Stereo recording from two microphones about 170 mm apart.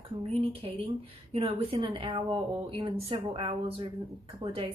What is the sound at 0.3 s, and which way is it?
Speech, 35° right (ahead or behind).